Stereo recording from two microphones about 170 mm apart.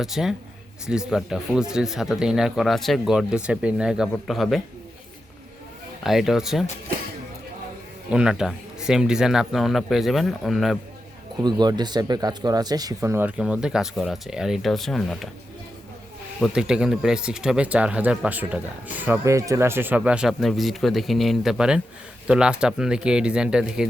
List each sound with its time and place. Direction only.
0.0 s speech: 5° right (ahead or behind)
6.0 s speech: centre (ahead or behind)
8.1 s speech: 5° right (ahead or behind)
11.3 s speech: 25° right (ahead or behind); by 15.3 s centre (ahead or behind)
16.4 s speech: 5° right (ahead or behind)